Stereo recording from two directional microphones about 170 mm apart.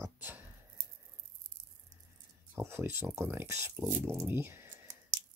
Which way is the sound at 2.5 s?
15° right (ahead or behind).